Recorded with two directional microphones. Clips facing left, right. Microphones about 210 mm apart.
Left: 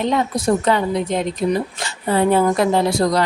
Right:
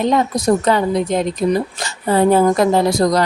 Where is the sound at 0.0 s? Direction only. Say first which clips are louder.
Right 3 dB; 40° right (ahead or behind).